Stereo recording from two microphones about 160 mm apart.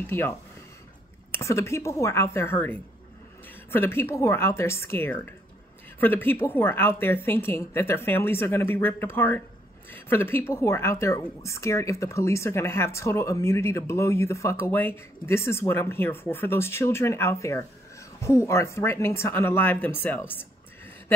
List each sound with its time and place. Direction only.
0.0 s a woman's voice: 15° left (ahead or behind)